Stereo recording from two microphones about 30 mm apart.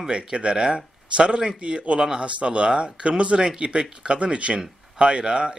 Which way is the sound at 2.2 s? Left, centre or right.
Right.